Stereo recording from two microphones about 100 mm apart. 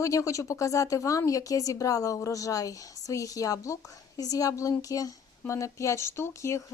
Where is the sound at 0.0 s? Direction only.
30° left (ahead or behind).